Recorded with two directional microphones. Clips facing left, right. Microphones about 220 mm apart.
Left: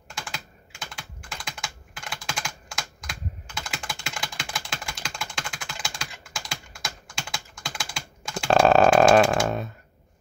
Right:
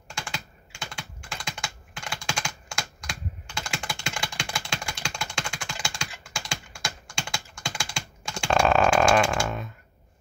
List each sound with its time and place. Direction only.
0.1 s computer keyboard: 5° left (ahead or behind)
5.9 s typing: 5° left (ahead or behind)
8.5 s chainsaw: 35° left (ahead or behind)